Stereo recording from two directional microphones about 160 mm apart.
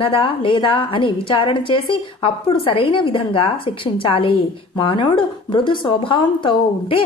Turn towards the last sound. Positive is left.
turn(degrees=30)  # may be behind; listen again after turning